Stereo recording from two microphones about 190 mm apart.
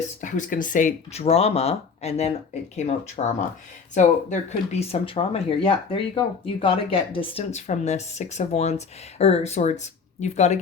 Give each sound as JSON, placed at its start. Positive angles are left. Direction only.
{"t": 0.2, "sound": "speech", "side_deg": 40}